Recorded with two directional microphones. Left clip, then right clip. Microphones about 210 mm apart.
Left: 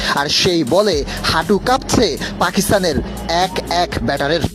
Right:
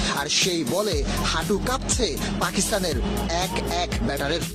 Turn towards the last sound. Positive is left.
turn(degrees=40)  # may be behind; listen again after turning